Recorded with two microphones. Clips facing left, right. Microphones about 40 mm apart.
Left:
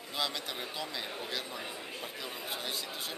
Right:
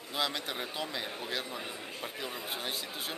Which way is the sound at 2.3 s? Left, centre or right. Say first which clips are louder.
Right 1 dB; centre.